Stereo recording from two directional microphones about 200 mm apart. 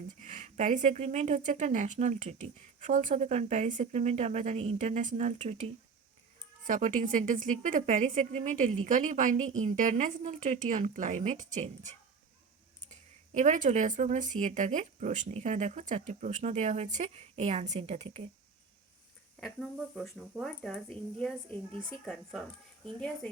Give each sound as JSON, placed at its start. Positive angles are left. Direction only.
{"t": 0.2, "sound": "speech", "side_deg": -40}
{"t": 12.9, "sound": "speech", "side_deg": -35}
{"t": 19.4, "sound": "speech", "side_deg": 0}